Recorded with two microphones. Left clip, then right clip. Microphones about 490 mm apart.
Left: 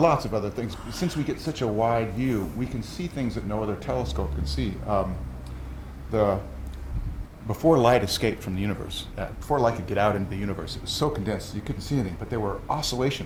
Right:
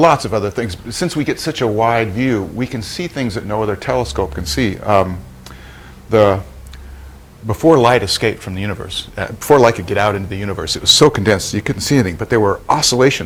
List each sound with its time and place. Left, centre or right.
0.0 s speech: right
6.1 s speech: right
7.4 s speech: right
9.2 s speech: right
9.8 s speech: right
10.8 s speech: right